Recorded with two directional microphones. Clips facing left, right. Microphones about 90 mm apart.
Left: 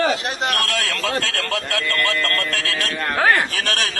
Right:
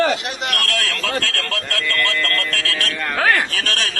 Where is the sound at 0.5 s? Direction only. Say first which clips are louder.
Even; 20° left (ahead or behind).